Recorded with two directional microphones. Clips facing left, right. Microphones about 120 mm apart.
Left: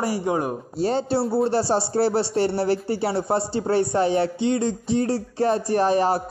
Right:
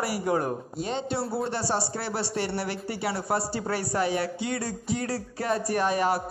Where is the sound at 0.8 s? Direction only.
35° left (ahead or behind).